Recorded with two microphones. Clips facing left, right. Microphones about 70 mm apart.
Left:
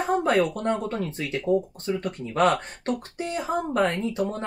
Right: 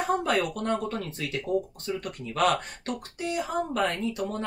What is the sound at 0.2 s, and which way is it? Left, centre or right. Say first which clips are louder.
Speech: left 4 dB; left.